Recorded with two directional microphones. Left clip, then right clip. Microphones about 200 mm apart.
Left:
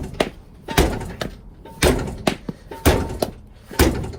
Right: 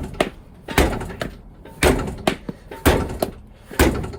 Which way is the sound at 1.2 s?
25° left (ahead or behind).